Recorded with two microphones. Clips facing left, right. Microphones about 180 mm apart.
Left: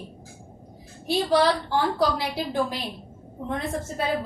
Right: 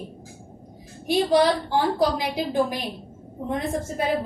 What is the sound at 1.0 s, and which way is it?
A woman's voice, 15° right (ahead or behind).